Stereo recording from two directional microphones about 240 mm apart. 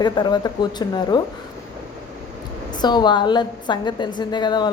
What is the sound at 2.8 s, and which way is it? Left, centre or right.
A woman's voice, centre.